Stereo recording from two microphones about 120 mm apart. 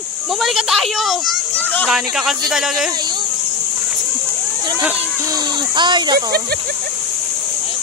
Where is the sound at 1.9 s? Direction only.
5° right (ahead or behind).